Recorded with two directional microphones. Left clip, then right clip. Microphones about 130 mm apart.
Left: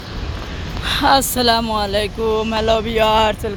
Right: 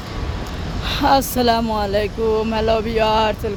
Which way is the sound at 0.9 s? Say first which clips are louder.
Left 2 dB; centre (ahead or behind).